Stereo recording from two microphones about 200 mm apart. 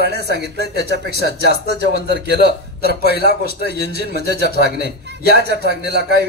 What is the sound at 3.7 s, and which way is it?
Speech, 55° right (ahead or behind).